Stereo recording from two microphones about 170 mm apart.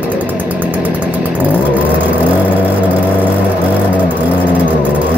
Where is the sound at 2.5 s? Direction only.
10° right (ahead or behind).